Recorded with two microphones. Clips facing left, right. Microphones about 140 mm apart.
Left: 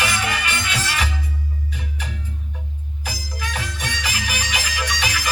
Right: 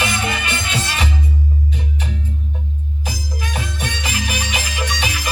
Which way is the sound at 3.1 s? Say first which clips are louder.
Right 2 dB; 20° right (ahead or behind).